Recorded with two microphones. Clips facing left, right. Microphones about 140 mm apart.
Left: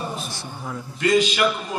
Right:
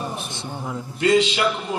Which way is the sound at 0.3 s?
20° right (ahead or behind).